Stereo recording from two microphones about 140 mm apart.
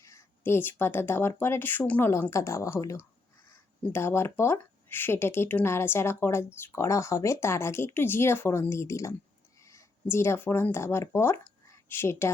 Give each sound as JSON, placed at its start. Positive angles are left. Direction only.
{"t": 0.0, "sound": "speech", "side_deg": 20}